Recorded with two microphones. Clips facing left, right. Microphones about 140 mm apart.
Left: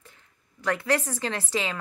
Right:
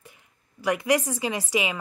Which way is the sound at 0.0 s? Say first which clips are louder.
Right 3 dB; 15° right (ahead or behind).